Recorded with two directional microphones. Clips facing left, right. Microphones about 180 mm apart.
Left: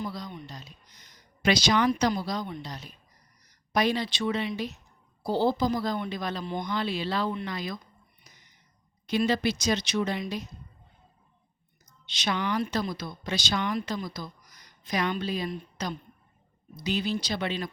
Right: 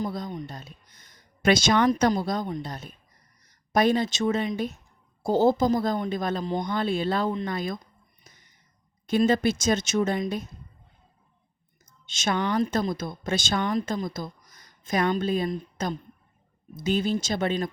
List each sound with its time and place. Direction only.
0.0 s speech: 45° right (ahead or behind)
8.3 s a sound: 50° right (ahead or behind)
9.0 s speech: 50° right (ahead or behind)
12.0 s speech: 45° right (ahead or behind)